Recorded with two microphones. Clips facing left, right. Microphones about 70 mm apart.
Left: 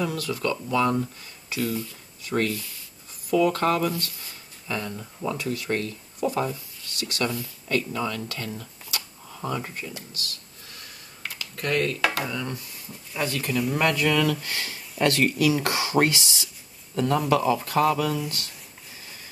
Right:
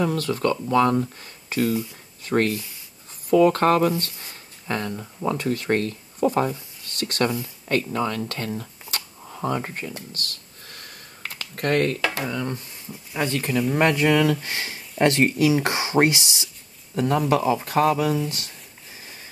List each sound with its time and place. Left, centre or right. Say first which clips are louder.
0.0 s speech: right 4 dB; right
8.5 s a sound: right 3 dB; right
12.1 s speech: right 2 dB; right